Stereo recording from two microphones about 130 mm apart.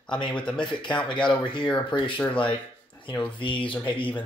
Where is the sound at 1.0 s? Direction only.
40° left (ahead or behind).